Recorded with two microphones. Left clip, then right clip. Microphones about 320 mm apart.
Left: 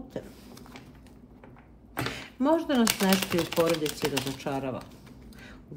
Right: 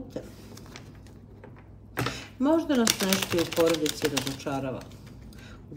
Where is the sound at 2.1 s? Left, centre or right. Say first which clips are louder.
Even; centre.